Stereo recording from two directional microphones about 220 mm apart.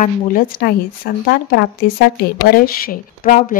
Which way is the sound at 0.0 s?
40° left (ahead or behind).